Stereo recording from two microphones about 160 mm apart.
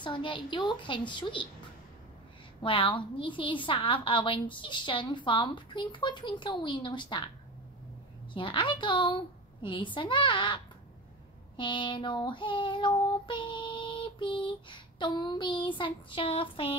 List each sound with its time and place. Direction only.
0.0 s a woman's voice: 30° left (ahead or behind)
2.6 s child singing: 30° left (ahead or behind)
8.3 s child singing: 30° left (ahead or behind)